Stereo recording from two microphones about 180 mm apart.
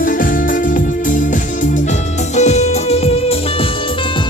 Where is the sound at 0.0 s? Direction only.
50° left (ahead or behind); by 3.7 s 35° left (ahead or behind).